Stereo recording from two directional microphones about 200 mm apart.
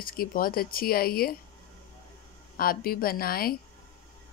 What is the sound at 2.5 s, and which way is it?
Speech, 50° left (ahead or behind).